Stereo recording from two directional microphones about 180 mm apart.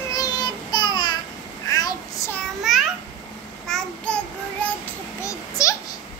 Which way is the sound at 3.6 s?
5° left (ahead or behind).